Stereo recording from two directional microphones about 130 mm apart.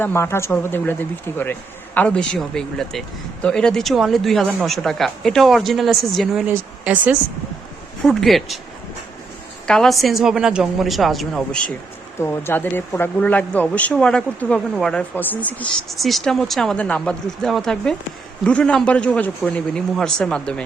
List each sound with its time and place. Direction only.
0.0 s speech: 20° left (ahead or behind)
2.0 s speech: 10° left (ahead or behind)
6.5 s speech: 10° right (ahead or behind)
8.0 s speech: centre (ahead or behind)
9.6 s a woman's voice: 5° left (ahead or behind)
12.2 s speech: 20° left (ahead or behind)
15.9 s speech: centre (ahead or behind)